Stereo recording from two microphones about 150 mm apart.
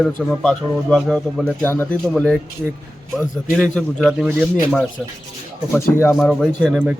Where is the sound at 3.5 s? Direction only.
5° left (ahead or behind).